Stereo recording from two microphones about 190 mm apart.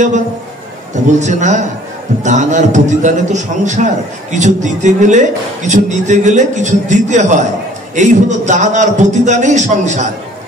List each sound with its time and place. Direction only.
1.2 s a man's voice: 40° right (ahead or behind)